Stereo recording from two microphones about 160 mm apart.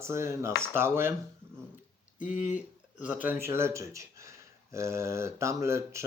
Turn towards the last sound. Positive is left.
turn(degrees=-20)  # may be behind; listen again after turning